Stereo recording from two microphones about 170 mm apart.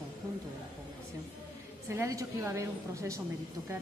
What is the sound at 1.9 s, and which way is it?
A woman's voice, 15° right (ahead or behind).